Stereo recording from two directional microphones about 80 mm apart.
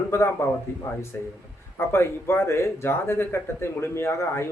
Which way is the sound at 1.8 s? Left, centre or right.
Left.